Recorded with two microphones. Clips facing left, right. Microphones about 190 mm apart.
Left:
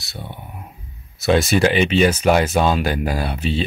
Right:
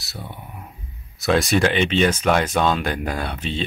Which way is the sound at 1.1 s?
Centre (ahead or behind).